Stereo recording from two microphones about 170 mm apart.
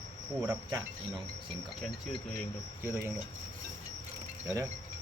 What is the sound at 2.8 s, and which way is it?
Speech, 15° right (ahead or behind).